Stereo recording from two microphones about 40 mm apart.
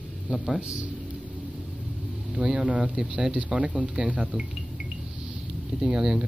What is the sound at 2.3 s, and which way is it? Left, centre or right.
Speech, right.